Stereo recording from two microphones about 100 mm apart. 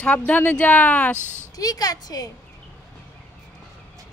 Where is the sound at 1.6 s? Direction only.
40° left (ahead or behind).